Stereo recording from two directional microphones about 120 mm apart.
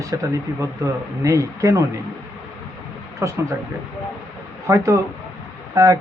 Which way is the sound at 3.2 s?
25° right (ahead or behind).